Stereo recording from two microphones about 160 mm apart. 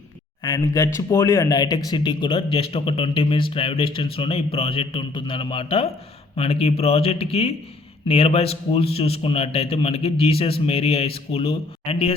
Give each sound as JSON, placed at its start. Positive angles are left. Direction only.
{"t": 0.4, "sound": "speech", "side_deg": 20}